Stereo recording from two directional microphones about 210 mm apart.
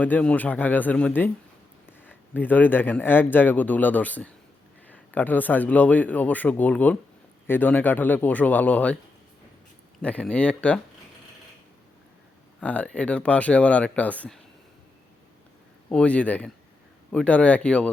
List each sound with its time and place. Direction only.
0.0 s speech: 5° left (ahead or behind)
10.0 s speech: 5° left (ahead or behind)
12.5 s speech: 5° left (ahead or behind)
15.9 s speech: 5° left (ahead or behind)